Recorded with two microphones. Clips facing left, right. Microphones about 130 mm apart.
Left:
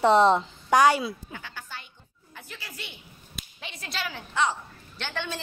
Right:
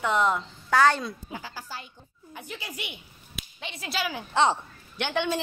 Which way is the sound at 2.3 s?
20° right (ahead or behind).